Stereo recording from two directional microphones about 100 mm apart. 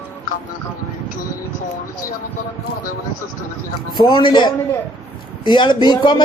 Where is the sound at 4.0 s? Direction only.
55° left (ahead or behind).